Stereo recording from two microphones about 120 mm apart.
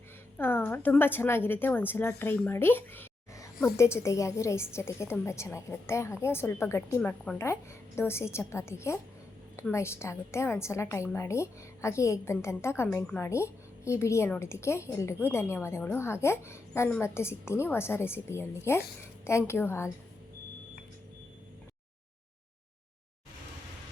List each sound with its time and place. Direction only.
0.3 s a woman's voice: 15° left (ahead or behind)